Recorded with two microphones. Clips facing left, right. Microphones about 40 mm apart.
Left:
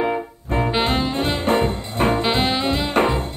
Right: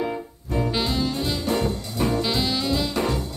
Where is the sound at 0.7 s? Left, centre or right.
Left.